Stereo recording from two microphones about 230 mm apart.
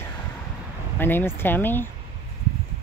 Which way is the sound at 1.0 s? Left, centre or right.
Centre.